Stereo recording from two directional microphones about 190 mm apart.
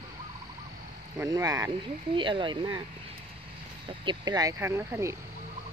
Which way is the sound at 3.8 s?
25° right (ahead or behind).